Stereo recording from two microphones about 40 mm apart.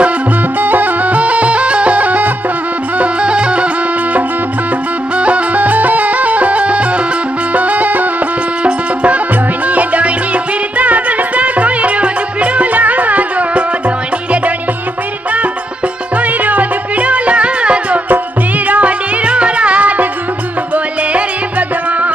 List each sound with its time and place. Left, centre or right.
0.6 s music: right
3.0 s music: right
5.1 s music: right
16.2 s music: right